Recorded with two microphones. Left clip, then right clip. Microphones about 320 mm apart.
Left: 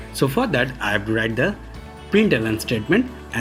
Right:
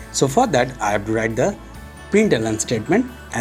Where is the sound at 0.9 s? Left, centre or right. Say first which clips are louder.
Even; right.